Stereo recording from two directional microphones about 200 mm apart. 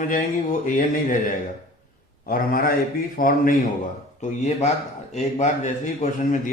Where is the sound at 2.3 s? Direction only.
45° left (ahead or behind).